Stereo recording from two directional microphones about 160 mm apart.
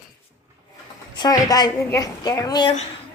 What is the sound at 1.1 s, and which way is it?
A woman's voice, 25° left (ahead or behind).